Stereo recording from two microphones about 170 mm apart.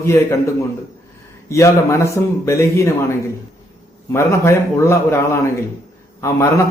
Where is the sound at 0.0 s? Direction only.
15° left (ahead or behind).